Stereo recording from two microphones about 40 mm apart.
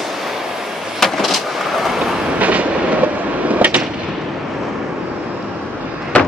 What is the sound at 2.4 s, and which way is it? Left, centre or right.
Train, right.